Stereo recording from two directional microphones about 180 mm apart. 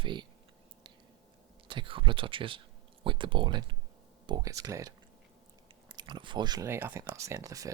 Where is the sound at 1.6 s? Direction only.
30° right (ahead or behind).